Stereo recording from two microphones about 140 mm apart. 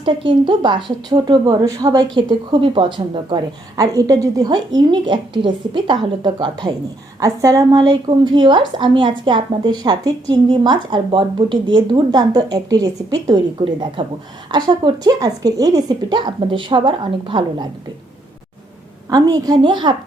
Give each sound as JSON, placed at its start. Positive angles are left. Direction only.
{"t": 0.0, "sound": "speech", "side_deg": -35}
{"t": 19.1, "sound": "speech", "side_deg": -25}